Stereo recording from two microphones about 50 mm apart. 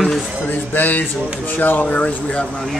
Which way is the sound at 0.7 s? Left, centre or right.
Left.